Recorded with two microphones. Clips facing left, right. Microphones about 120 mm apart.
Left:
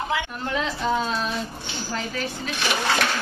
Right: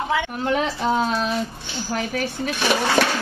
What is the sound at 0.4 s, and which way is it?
A woman's voice, 60° right (ahead or behind).